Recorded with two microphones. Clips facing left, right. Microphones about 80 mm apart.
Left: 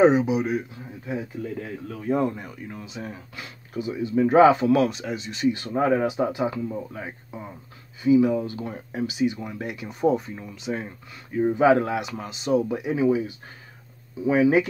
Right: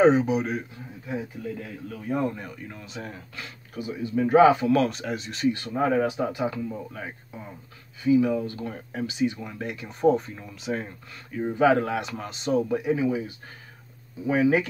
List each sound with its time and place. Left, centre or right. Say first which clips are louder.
0.0 s speech: left 1 dB; centre
1.6 s speech: left 3 dB; left
2.3 s speech: left 2 dB; centre
3.3 s speech: left 5 dB; left
4.7 s speech: left 1 dB; centre
5.5 s speech: left 2 dB; left
10.1 s speech: left 1 dB; centre
11.5 s speech: left 1 dB; left
12.0 s speech: left 1 dB; centre
12.6 s speech: right 2 dB; centre
12.9 s speech: left 6 dB; left
14.3 s speech: left 2 dB; left